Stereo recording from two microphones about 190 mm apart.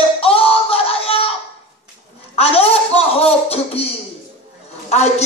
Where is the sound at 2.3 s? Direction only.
30° left (ahead or behind).